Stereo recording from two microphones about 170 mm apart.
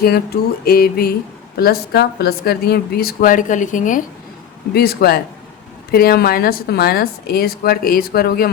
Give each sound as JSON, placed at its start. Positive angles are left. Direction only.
{"t": 0.6, "sound": "a woman's voice", "side_deg": 60}
{"t": 4.7, "sound": "a woman's voice", "side_deg": 65}